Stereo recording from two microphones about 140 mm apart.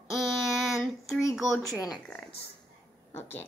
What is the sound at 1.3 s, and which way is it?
Speech, centre (ahead or behind).